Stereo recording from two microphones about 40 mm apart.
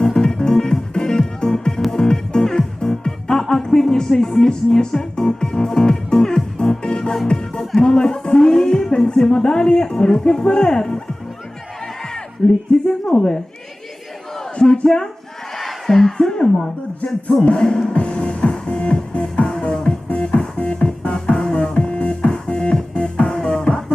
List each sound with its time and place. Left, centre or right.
0.0 s music: centre
12.4 s speech: left
14.6 s speech: centre
15.5 s a sound: centre
17.4 s speech: left
17.9 s music: left